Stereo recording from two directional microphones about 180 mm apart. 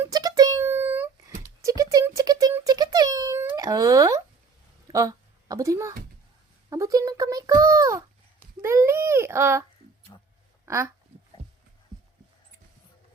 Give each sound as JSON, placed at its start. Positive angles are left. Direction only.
{"t": 0.0, "sound": "music", "side_deg": -20}
{"t": 1.6, "sound": "a sound", "side_deg": -20}
{"t": 4.9, "sound": "a child's voice", "side_deg": -20}
{"t": 10.7, "sound": "speech", "side_deg": -15}